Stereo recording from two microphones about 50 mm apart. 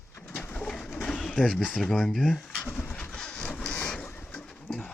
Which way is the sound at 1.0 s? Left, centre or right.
Centre.